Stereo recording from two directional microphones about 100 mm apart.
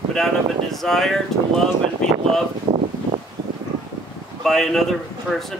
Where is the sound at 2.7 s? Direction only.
70° right (ahead or behind).